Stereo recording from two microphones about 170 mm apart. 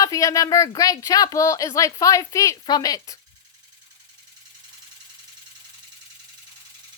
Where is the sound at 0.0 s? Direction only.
20° left (ahead or behind).